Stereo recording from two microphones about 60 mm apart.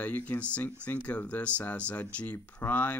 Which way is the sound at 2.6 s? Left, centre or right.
Left.